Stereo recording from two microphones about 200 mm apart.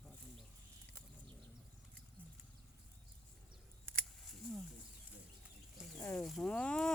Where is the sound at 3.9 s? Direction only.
Centre (ahead or behind).